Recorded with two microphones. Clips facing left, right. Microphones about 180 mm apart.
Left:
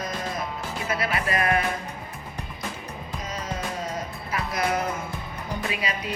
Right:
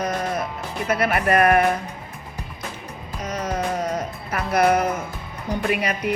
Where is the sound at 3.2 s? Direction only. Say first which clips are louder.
Right 7 dB; 70° right (ahead or behind).